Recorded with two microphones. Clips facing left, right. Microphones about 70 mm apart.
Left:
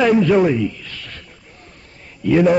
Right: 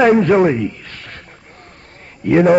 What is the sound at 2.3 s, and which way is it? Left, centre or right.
Speech, right.